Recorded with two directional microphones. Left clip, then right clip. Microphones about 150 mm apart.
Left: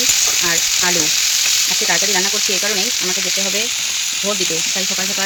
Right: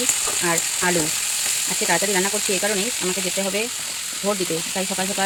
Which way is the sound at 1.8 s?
5° right (ahead or behind).